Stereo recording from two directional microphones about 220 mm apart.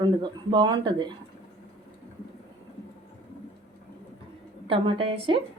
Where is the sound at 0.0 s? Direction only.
20° right (ahead or behind).